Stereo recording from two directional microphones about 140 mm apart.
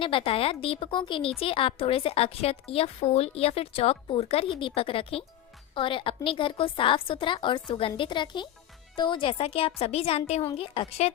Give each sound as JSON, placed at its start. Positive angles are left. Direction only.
{"t": 0.0, "sound": "a woman's voice", "side_deg": 40}